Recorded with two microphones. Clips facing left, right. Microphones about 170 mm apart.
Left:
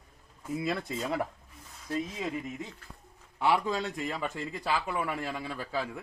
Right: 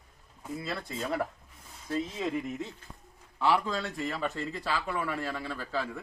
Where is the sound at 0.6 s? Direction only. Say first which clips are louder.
Left 4 dB; 20° left (ahead or behind).